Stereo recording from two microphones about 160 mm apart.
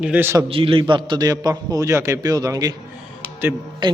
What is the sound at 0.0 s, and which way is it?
Speech, 10° right (ahead or behind).